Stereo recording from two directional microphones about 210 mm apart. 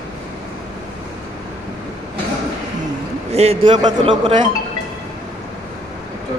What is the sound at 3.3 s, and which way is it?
Speech, 30° right (ahead or behind).